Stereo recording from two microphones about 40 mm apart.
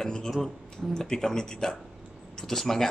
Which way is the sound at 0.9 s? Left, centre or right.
Centre.